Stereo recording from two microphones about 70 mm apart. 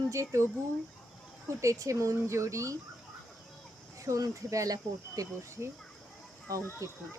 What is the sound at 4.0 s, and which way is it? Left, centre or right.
Speech, right.